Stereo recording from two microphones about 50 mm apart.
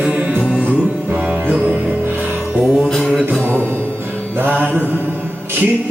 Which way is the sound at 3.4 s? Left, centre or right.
Right.